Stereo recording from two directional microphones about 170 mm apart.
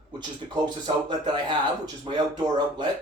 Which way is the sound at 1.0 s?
25° right (ahead or behind).